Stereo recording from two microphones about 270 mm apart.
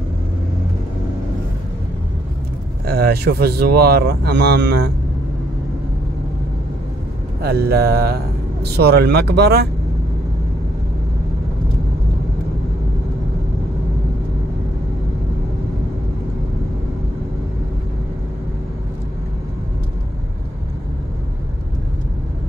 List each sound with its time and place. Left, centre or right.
2.9 s speech: right
7.4 s speech: right